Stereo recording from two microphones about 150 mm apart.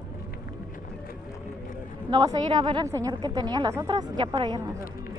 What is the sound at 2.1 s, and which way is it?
A woman's voice, 25° right (ahead or behind).